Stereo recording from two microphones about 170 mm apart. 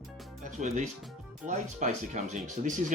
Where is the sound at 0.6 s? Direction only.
45° right (ahead or behind).